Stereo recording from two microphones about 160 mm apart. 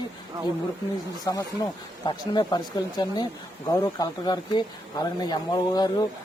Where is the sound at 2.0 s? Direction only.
25° left (ahead or behind).